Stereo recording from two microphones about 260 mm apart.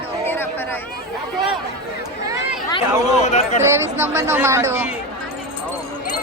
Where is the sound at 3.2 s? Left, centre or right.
Left.